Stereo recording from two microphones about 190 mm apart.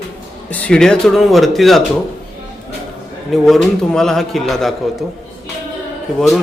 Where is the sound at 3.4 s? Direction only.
Centre (ahead or behind).